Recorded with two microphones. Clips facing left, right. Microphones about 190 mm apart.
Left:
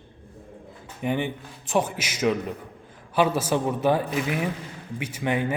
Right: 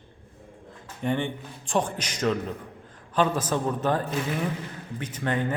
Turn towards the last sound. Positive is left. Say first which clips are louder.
# left 2 dB
turn(degrees=10)  # may be behind; listen again after turning